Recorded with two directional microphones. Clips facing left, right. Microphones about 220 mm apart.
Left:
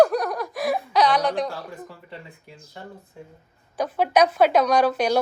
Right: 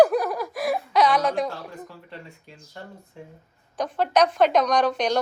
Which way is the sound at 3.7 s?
10° left (ahead or behind).